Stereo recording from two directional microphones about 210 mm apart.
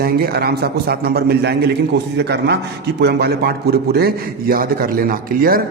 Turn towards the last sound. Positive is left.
turn(degrees=-45)  # may be behind; listen again after turning